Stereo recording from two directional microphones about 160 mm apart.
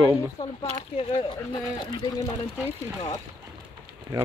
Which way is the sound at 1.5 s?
25° left (ahead or behind).